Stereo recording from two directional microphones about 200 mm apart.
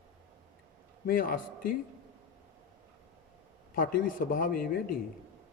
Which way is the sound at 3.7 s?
45° left (ahead or behind).